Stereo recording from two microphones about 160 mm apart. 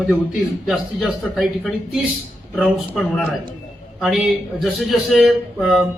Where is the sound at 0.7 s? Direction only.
Centre (ahead or behind).